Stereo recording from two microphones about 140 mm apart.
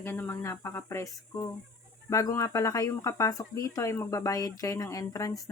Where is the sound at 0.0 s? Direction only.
15° left (ahead or behind).